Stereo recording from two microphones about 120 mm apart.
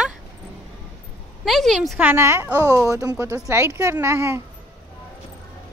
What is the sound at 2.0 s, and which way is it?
Speech, 15° right (ahead or behind).